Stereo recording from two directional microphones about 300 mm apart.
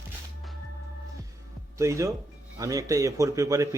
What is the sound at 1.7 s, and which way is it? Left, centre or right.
Speech, centre.